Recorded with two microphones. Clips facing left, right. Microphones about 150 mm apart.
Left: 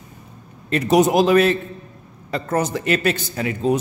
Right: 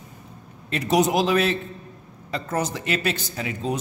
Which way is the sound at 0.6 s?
50° left (ahead or behind).